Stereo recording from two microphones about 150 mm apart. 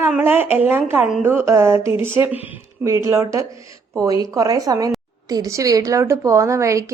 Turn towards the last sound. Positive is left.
turn(degrees=-20)  # may be behind; listen again after turning